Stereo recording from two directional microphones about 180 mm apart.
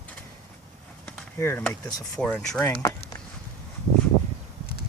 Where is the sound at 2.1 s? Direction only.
5° left (ahead or behind).